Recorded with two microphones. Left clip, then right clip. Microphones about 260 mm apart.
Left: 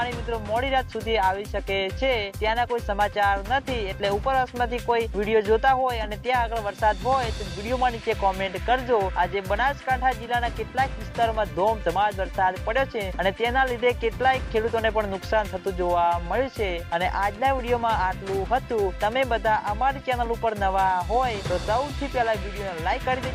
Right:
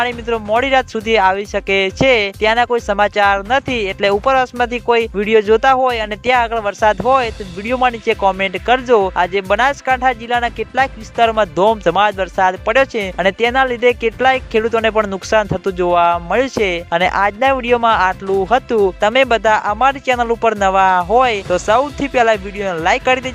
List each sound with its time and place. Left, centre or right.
0.0 s speech: right